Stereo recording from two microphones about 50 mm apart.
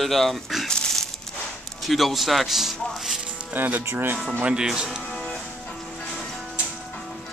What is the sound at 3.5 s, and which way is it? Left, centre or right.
Speech, right.